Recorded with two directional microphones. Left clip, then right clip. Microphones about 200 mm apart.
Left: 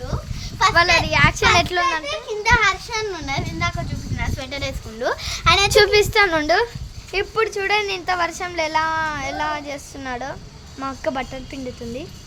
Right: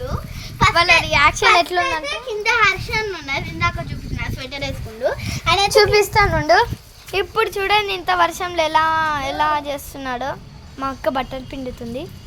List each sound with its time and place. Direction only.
0.7 s a woman's voice: 10° right (ahead or behind)
1.5 s speech: 5° left (ahead or behind)
2.5 s a woman's voice: 30° left (ahead or behind)
4.4 s a woman's voice: 35° left (ahead or behind); by 6.2 s 10° left (ahead or behind)
6.2 s a woman's voice: 30° left (ahead or behind)
7.1 s a woman's voice: 5° right (ahead or behind)